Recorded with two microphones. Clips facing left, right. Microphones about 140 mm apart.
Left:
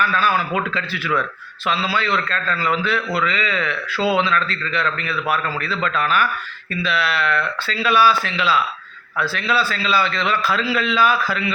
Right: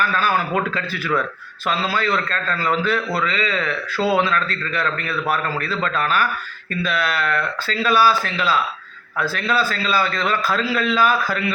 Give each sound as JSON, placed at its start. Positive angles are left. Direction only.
{"t": 0.2, "sound": "a man's voice", "side_deg": -45}